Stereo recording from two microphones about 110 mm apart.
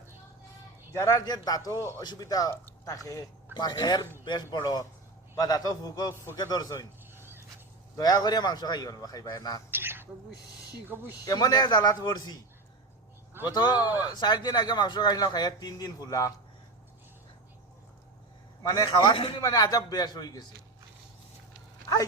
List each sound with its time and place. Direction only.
0.9 s a man's voice: 25° left (ahead or behind)
1.2 s speech: 35° left (ahead or behind)
7.9 s speech: 35° left (ahead or behind)
9.7 s speech: 20° right (ahead or behind)
11.3 s speech: 35° left (ahead or behind)
13.5 s speech: 40° left (ahead or behind)
18.9 s a man's voice: 50° left (ahead or behind)
19.4 s speech: 35° left (ahead or behind)